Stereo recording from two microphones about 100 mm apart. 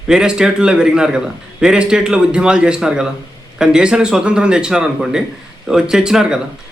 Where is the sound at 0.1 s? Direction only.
5° right (ahead or behind).